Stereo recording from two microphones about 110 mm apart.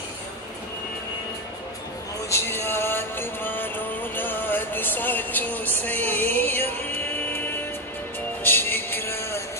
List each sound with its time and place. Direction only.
2.2 s music: 25° left (ahead or behind)